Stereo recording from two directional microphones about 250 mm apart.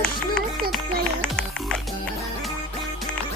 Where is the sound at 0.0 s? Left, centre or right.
Centre.